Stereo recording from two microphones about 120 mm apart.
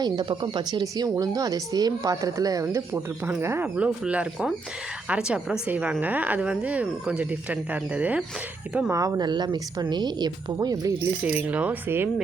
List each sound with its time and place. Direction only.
0.0 s speech: 40° right (ahead or behind); by 3.7 s 20° right (ahead or behind)
3.8 s a woman's voice: 10° right (ahead or behind)
8.9 s speech: 30° right (ahead or behind)
11.2 s a woman's voice: 10° right (ahead or behind)